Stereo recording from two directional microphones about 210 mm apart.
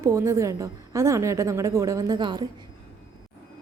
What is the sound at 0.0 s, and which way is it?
A woman's voice, 15° right (ahead or behind).